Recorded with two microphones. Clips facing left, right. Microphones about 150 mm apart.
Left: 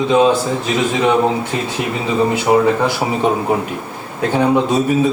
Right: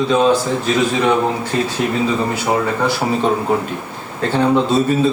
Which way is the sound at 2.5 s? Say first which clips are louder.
Left 5 dB; 10° left (ahead or behind).